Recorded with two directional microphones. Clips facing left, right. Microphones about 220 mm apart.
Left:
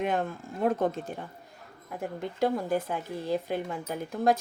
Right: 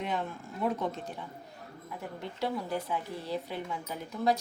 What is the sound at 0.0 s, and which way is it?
A woman's voice, 50° left (ahead or behind).